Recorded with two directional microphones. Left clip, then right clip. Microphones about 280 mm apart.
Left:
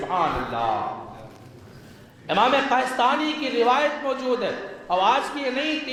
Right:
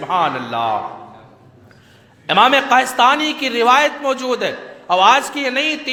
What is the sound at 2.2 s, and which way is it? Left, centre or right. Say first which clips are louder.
A man's voice: right 7 dB; right.